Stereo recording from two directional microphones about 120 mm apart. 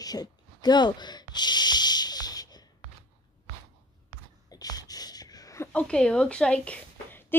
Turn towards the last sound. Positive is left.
turn(degrees=10)  # may be behind; listen again after turning